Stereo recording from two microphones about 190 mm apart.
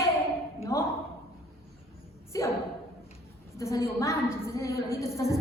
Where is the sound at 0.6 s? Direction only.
15° left (ahead or behind).